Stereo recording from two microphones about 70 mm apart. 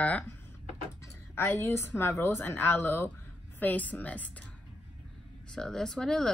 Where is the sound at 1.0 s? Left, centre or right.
Left.